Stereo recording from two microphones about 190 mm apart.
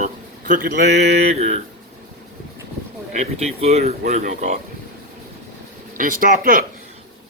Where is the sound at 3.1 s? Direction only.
35° right (ahead or behind).